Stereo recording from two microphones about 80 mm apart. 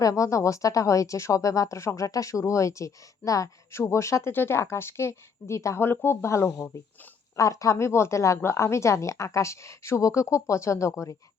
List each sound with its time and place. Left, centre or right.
0.0 s a woman's voice: left